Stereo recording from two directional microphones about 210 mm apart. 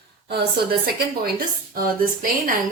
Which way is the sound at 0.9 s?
45° right (ahead or behind).